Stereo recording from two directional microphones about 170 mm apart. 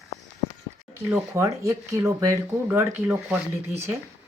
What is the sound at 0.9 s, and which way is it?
Speech, 10° right (ahead or behind).